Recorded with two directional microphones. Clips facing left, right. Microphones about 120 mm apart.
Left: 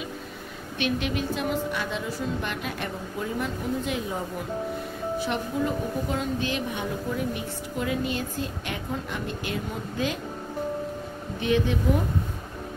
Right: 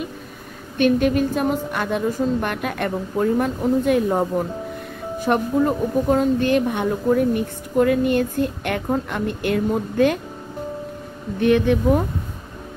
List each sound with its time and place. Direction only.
0.7 s a woman's voice: 45° right (ahead or behind)
11.3 s speech: 60° right (ahead or behind)